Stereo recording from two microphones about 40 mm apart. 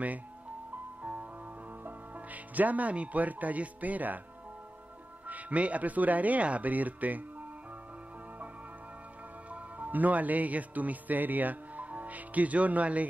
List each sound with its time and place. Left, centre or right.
1.8 s speech: right
5.2 s speech: right
9.5 s speech: right